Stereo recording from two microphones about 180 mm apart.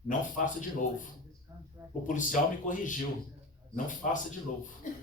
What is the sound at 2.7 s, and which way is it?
Speech, 45° left (ahead or behind).